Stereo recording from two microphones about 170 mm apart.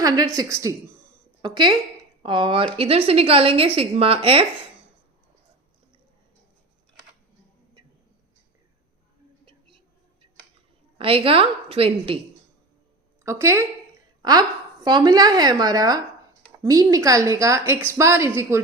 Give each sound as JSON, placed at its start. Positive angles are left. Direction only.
{"t": 0.0, "sound": "a woman's voice", "side_deg": -20}
{"t": 9.5, "sound": "a sound", "side_deg": -30}
{"t": 10.9, "sound": "a woman's voice", "side_deg": -35}
{"t": 13.2, "sound": "a woman's voice", "side_deg": -15}